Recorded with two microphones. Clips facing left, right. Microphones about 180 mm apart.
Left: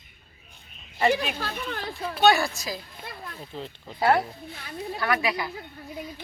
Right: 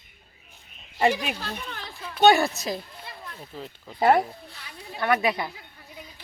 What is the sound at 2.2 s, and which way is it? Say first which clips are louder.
Speech: right 3 dB; 20° right (ahead or behind).